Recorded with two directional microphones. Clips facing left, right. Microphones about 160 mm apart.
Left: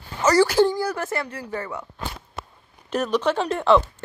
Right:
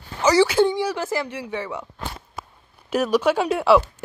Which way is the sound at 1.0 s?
15° right (ahead or behind).